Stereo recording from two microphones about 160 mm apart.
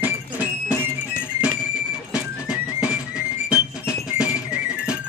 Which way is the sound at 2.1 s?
5° right (ahead or behind).